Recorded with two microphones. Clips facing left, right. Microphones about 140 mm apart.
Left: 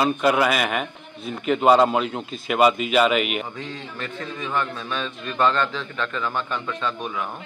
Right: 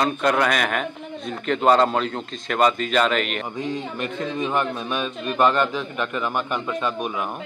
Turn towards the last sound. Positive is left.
turn(degrees=-15)  # may be behind; listen again after turning